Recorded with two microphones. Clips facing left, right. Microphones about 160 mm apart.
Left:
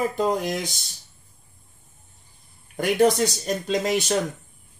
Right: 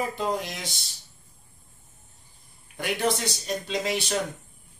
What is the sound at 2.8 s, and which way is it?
Speech, 45° left (ahead or behind).